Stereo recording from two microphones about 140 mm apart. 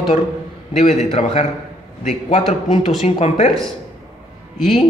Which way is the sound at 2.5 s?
50° left (ahead or behind).